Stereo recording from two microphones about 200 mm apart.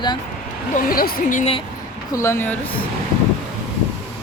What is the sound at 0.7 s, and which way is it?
Speech, 45° left (ahead or behind).